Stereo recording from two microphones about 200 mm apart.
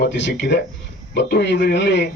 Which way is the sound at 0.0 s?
60° left (ahead or behind).